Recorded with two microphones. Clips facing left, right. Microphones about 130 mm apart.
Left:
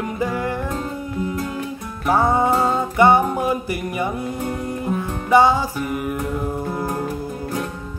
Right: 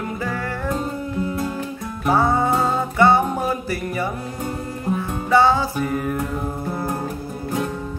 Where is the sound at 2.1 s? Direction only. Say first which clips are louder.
Left 1 dB; 15° left (ahead or behind).